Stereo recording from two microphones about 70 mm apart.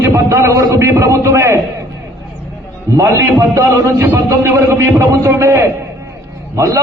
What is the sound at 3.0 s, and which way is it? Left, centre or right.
A man's voice, right.